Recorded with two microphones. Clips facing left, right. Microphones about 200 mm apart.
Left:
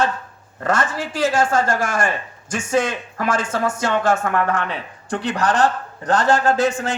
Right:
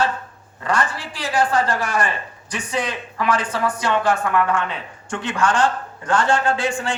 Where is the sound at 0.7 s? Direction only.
45° left (ahead or behind).